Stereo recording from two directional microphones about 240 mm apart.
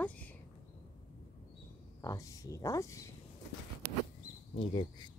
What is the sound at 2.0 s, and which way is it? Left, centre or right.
Speech, centre.